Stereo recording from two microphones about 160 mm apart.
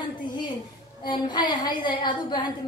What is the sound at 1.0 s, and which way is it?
A woman's voice, 25° left (ahead or behind).